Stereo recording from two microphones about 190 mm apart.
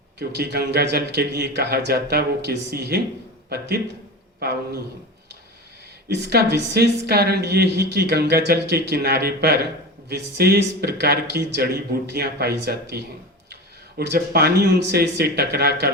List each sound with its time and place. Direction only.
0.2 s speech: 60° right (ahead or behind)
4.4 s a man's voice: 55° right (ahead or behind)
6.1 s speech: 60° right (ahead or behind)
14.0 s speech: 55° right (ahead or behind)